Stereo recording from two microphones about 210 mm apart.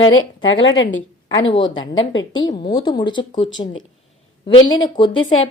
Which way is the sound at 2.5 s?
20° left (ahead or behind).